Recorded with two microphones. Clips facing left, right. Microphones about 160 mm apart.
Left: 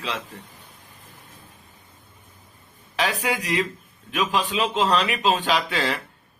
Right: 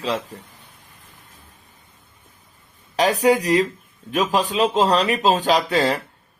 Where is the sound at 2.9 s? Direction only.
40° right (ahead or behind).